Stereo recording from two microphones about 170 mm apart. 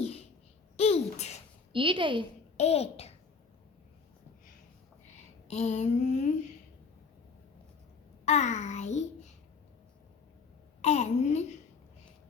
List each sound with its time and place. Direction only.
0.8 s babbling: 35° left (ahead or behind)
1.7 s a woman's voice: 30° right (ahead or behind)
2.6 s speech: 35° left (ahead or behind)
5.5 s child singing: 40° left (ahead or behind)
8.2 s child singing: 45° left (ahead or behind)
10.8 s speech: 40° left (ahead or behind)